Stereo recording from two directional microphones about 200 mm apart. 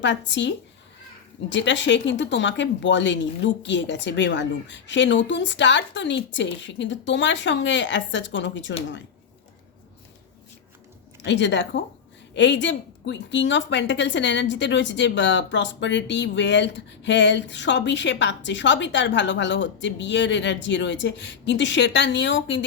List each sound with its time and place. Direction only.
0.0 s a woman's voice: 65° left (ahead or behind)
11.2 s a woman's voice: 60° left (ahead or behind)